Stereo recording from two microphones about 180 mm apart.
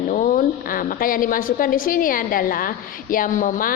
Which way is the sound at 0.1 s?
45° left (ahead or behind).